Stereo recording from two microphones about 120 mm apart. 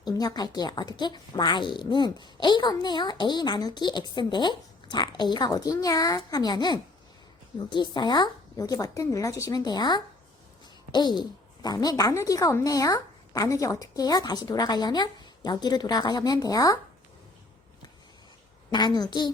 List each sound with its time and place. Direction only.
0.0 s speech: 35° left (ahead or behind)
18.7 s speech: 35° left (ahead or behind)